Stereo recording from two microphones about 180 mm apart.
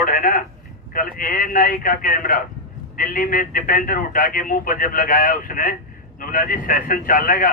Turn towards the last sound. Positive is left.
turn(degrees=50)  # may be behind; listen again after turning